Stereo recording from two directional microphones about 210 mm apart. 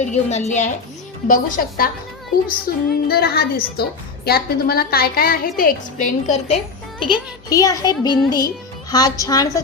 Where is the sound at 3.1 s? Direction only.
45° left (ahead or behind).